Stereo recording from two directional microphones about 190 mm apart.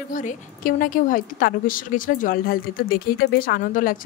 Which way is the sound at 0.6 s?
45° left (ahead or behind).